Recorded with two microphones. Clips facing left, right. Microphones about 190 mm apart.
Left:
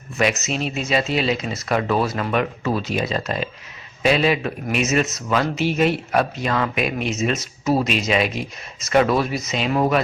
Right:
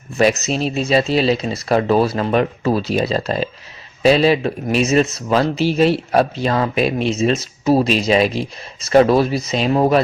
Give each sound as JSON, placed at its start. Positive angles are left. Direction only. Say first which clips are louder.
{"t": 0.2, "sound": "speech", "louder": "right 5 dB", "side_deg": -35}